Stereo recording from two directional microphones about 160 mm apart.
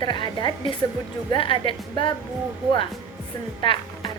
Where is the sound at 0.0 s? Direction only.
30° left (ahead or behind).